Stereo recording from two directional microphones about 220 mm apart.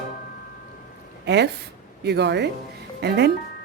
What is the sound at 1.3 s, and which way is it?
Speech, 50° right (ahead or behind).